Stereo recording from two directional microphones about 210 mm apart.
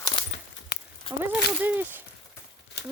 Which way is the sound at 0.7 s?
40° left (ahead or behind).